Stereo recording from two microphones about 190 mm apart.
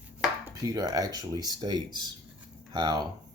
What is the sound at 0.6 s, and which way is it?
Speech, 20° right (ahead or behind).